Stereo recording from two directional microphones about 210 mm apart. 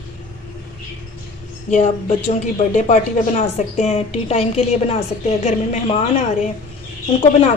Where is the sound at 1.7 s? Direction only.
35° left (ahead or behind).